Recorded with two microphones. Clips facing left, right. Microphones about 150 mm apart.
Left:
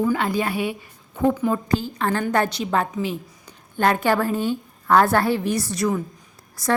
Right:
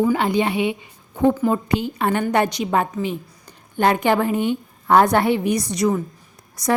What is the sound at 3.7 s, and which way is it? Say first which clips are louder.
A woman's voice: right 2 dB; 15° right (ahead or behind).